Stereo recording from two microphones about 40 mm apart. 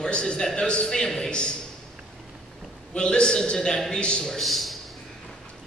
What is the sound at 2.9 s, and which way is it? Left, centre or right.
A man's voice, left.